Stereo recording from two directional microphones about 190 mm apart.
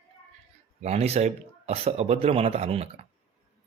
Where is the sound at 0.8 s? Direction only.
35° right (ahead or behind).